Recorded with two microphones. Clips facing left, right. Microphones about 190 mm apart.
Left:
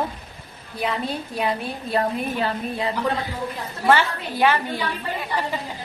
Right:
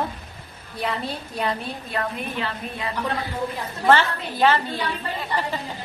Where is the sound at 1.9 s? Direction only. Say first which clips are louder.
Left 5 dB; 35° left (ahead or behind).